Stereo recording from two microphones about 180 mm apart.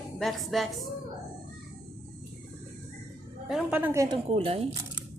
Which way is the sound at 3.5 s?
5° right (ahead or behind).